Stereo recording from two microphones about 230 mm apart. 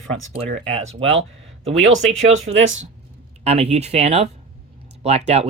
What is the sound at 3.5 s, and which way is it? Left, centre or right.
Speech, right.